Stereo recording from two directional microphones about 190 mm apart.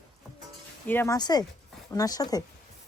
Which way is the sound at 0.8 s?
15° left (ahead or behind).